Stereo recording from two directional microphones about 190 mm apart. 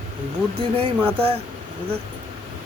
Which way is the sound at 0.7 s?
30° right (ahead or behind).